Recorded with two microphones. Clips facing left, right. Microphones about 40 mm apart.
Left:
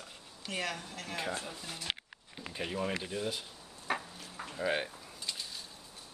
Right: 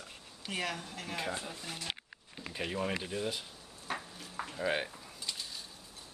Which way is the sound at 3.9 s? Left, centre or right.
Left.